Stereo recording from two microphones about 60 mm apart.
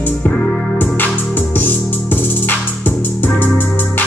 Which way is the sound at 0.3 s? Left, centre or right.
Centre.